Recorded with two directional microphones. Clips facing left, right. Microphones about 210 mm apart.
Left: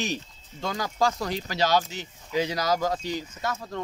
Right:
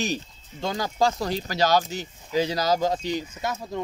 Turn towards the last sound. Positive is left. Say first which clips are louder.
# right 2 dB
turn(degrees=-15)  # may be behind; listen again after turning